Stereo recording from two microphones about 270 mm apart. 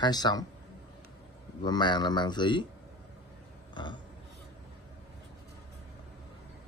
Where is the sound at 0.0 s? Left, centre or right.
Centre.